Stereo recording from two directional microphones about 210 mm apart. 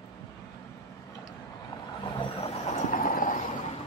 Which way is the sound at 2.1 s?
20° left (ahead or behind).